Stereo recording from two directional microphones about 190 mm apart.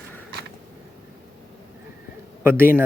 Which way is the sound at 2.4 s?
10° right (ahead or behind).